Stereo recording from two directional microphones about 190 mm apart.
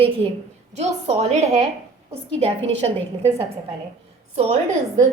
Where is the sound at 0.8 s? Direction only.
35° right (ahead or behind).